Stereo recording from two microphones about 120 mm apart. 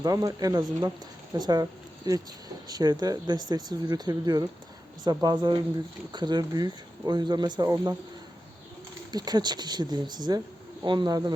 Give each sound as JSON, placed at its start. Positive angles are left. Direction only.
{"t": 0.0, "sound": "speech", "side_deg": -30}
{"t": 9.1, "sound": "speech", "side_deg": -35}